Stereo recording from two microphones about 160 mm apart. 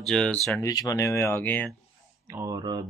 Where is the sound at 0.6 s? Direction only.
20° left (ahead or behind).